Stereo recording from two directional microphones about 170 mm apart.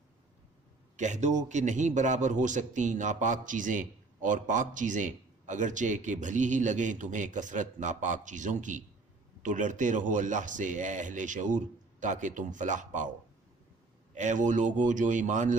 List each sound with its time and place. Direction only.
0.9 s a man's voice: 45° right (ahead or behind)
14.1 s a man's voice: 45° right (ahead or behind)